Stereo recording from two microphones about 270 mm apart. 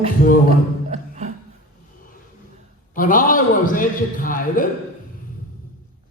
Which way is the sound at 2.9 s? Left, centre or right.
Left.